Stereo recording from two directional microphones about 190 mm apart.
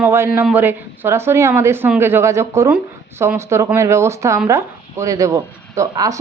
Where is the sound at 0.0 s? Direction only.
10° right (ahead or behind).